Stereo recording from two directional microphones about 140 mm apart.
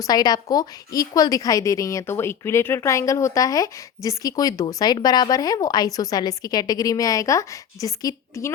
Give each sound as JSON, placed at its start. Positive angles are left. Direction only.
{"t": 0.0, "sound": "a woman's voice", "side_deg": 30}